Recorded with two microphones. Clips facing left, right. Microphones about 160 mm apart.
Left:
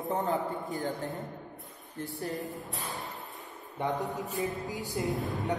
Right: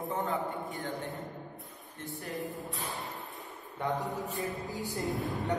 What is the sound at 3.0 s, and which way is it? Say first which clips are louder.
Music: even; centre (ahead or behind).